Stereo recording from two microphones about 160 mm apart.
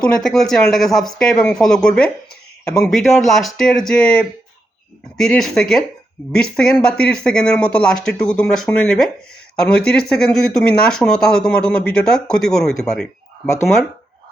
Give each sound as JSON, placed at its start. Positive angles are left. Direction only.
{"t": 0.0, "sound": "speech", "side_deg": 0}